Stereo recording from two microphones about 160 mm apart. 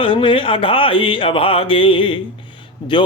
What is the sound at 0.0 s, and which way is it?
Speech, 30° left (ahead or behind).